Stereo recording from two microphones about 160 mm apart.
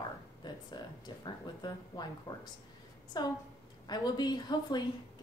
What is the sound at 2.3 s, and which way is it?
A woman's voice, 25° left (ahead or behind).